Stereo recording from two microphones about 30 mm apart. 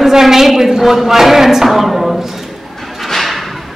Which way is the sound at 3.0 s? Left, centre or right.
Centre.